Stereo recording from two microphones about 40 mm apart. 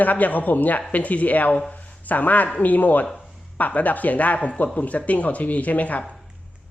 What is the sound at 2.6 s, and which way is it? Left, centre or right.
Speech, left.